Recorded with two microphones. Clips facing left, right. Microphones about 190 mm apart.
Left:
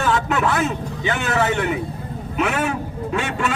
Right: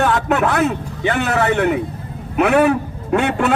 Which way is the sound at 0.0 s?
60° right (ahead or behind).